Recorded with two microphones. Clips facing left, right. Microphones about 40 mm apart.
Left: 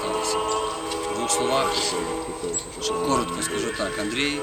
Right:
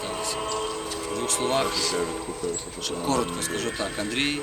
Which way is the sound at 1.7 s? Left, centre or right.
Left.